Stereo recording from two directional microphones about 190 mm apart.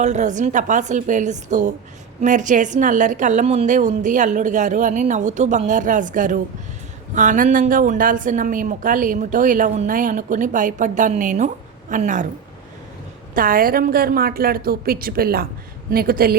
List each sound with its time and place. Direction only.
0.0 s a woman's voice: 40° right (ahead or behind)
13.3 s speech: 45° right (ahead or behind)